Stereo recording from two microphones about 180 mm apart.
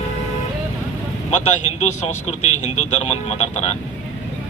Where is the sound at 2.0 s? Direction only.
40° left (ahead or behind).